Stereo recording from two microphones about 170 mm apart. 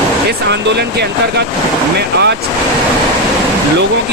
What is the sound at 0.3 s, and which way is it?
Speech, 85° right.